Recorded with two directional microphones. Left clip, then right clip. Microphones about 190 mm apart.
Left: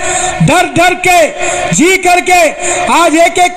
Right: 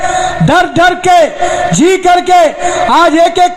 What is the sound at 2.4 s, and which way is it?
Speech, 20° left (ahead or behind).